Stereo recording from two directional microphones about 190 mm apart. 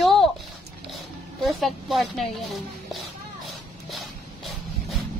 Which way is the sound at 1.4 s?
Centre (ahead or behind).